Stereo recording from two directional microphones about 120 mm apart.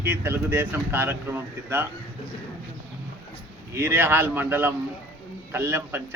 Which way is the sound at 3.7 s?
20° right (ahead or behind).